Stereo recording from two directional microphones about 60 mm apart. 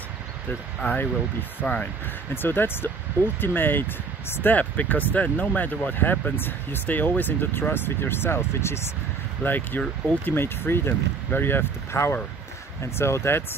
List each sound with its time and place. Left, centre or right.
1.6 s speech: left
9.4 s speech: left